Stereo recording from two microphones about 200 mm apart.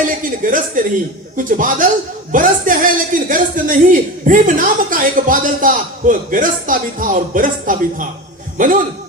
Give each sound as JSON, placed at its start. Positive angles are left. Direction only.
{"t": 0.4, "sound": "a man's voice", "side_deg": -40}